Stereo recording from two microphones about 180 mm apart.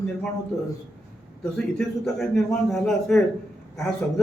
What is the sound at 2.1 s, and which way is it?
A man's voice, centre (ahead or behind).